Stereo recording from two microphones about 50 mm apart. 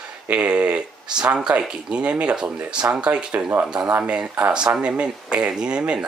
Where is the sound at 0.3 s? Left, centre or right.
Right.